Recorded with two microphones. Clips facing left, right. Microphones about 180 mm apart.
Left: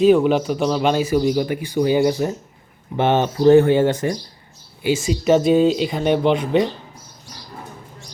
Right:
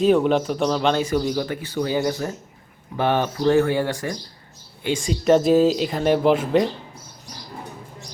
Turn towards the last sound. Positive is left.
turn(degrees=0)  # may be behind; listen again after turning